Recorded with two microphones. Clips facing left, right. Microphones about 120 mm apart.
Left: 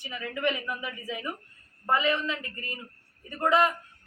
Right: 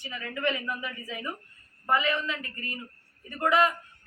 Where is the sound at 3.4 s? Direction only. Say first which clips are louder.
Even; 25° left (ahead or behind).